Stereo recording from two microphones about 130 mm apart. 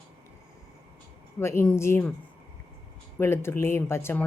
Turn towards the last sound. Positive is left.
turn(degrees=20)  # may be behind; listen again after turning